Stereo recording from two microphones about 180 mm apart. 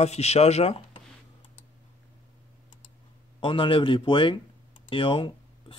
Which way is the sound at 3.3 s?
30° left (ahead or behind).